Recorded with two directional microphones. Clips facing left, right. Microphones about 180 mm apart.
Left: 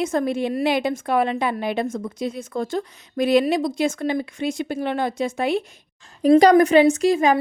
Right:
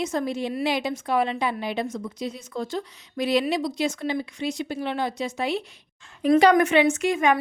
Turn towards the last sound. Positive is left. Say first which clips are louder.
# left 4 dB
turn(degrees=35)  # may be behind; listen again after turning